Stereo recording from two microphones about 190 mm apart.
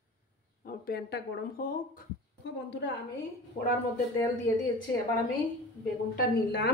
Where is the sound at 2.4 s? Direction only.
65° left (ahead or behind).